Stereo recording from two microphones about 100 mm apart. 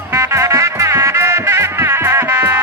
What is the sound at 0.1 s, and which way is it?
Music, 30° right (ahead or behind).